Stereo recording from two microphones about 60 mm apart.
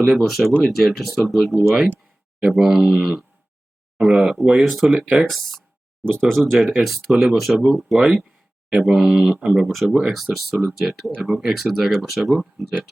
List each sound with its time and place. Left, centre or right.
0.0 s speech: centre
3.9 s speech: centre
4.6 s speech: centre
4.9 s speech: centre
5.3 s speech: centre
9.6 s speech: centre